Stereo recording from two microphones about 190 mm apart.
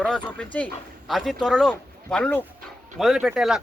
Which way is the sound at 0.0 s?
5° left (ahead or behind).